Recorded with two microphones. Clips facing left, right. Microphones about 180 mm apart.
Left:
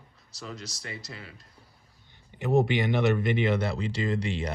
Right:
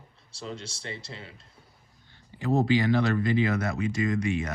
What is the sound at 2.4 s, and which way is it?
Speech, 20° left (ahead or behind).